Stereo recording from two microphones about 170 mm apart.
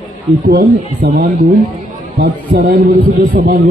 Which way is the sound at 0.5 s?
55° right (ahead or behind).